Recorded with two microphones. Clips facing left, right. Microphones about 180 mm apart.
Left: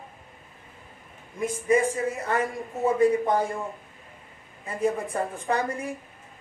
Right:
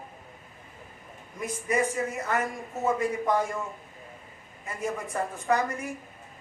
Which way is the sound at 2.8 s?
30° left (ahead or behind).